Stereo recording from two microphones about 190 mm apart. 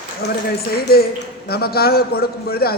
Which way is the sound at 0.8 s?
55° left (ahead or behind).